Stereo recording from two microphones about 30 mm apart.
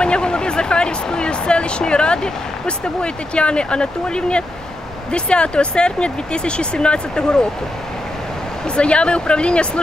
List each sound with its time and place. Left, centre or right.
0.0 s speech: left
8.7 s speech: left